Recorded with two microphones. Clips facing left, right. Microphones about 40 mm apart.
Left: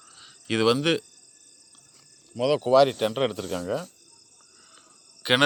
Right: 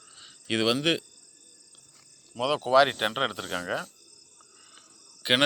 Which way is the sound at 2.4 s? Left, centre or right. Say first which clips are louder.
Left 3 dB; centre.